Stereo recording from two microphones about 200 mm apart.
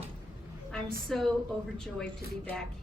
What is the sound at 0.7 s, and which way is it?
Speech, centre (ahead or behind).